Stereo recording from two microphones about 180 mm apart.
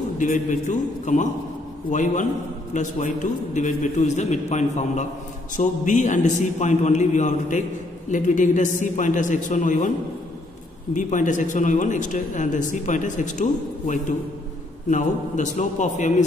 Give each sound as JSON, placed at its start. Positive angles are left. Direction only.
{"t": 0.2, "sound": "a man's voice", "side_deg": 45}
{"t": 11.0, "sound": "a man's voice", "side_deg": 45}